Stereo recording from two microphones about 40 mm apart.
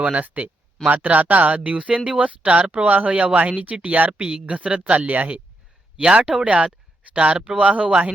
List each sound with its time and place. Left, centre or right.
0.2 s speech: right
4.2 s speech: right
4.9 s speech: right
6.1 s speech: right